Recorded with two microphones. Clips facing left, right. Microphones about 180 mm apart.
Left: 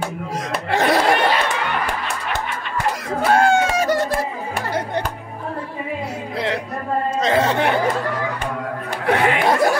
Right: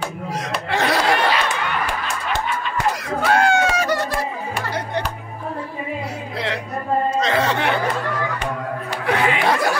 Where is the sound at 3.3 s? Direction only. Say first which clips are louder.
Left 2 dB; 50° left (ahead or behind).